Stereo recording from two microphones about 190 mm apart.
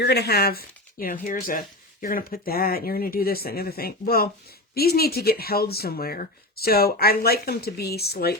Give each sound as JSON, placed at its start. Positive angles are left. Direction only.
{"t": 0.0, "sound": "speech", "side_deg": 60}